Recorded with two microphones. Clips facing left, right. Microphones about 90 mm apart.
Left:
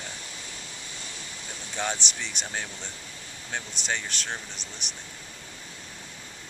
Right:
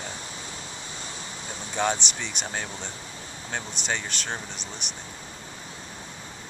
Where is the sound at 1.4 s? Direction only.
30° right (ahead or behind).